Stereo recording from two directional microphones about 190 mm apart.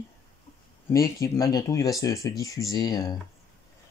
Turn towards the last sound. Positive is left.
turn(degrees=20)  # may be behind; listen again after turning